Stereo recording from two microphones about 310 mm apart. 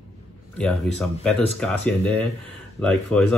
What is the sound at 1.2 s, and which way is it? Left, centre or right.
Speech, centre.